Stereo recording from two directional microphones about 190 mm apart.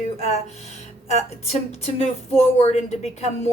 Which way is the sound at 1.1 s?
35° left (ahead or behind).